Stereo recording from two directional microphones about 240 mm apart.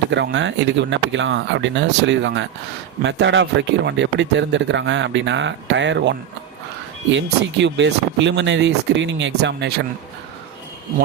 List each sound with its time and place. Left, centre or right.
0.1 s speech: right